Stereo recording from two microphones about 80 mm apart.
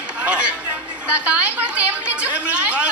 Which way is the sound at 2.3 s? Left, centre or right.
Centre.